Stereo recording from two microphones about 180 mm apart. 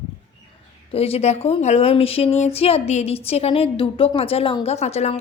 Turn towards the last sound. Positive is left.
turn(degrees=35)  # may be behind; listen again after turning